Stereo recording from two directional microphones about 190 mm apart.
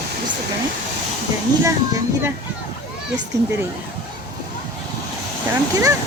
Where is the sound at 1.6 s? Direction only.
15° right (ahead or behind).